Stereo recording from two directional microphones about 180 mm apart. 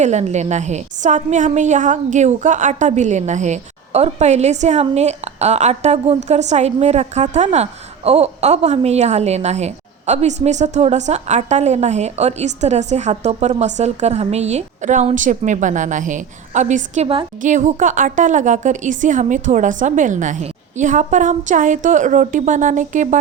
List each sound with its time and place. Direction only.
0.0 s a woman's voice: 40° right (ahead or behind)